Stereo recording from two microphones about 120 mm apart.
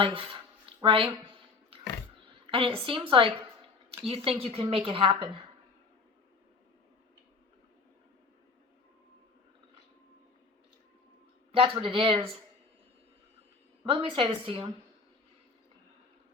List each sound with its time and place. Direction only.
0.0 s a sound: 45° right (ahead or behind)
2.5 s speech: 45° right (ahead or behind)
11.5 s speech: 50° right (ahead or behind)
13.8 s speech: 45° right (ahead or behind)